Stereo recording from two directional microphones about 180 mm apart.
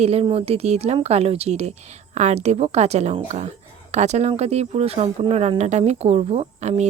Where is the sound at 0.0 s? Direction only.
35° right (ahead or behind).